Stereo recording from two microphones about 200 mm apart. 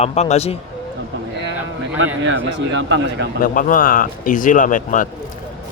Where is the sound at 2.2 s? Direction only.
65° right (ahead or behind).